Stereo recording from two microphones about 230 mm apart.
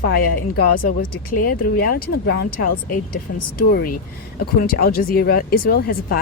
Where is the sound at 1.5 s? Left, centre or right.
Left.